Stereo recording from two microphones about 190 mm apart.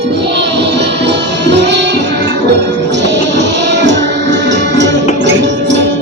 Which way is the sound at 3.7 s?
65° right (ahead or behind).